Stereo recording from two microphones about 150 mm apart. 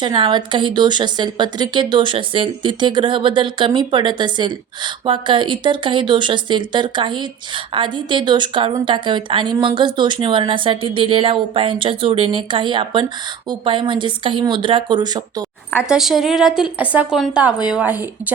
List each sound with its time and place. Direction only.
0.0 s speech: 30° right (ahead or behind)
15.9 s a woman's voice: centre (ahead or behind)